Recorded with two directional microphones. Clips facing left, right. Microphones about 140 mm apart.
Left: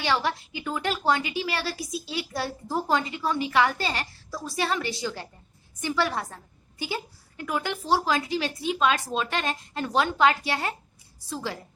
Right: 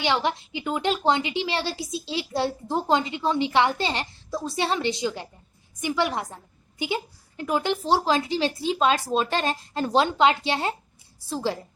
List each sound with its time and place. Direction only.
0.0 s a woman's voice: 20° right (ahead or behind)